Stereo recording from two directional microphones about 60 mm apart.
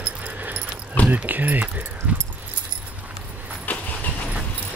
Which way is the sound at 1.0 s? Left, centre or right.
Left.